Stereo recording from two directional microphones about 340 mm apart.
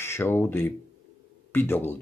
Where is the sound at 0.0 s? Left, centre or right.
Centre.